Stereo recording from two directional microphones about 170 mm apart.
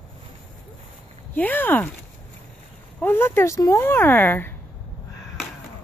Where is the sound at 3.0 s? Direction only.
15° left (ahead or behind).